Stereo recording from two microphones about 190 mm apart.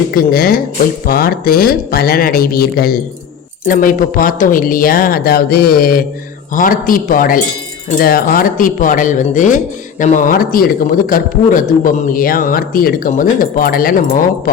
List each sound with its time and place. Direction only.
0.1 s speech: 50° left (ahead or behind)